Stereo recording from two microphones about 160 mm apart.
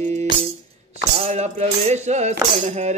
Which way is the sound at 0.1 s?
45° right (ahead or behind).